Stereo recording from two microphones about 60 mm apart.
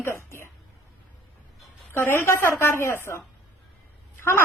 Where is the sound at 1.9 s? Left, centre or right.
Left.